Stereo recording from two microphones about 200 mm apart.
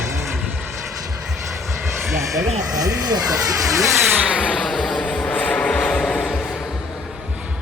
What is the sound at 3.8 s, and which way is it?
Vehicle, centre (ahead or behind).